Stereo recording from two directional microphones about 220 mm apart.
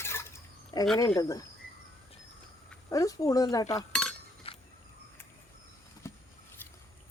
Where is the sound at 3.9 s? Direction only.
Centre (ahead or behind).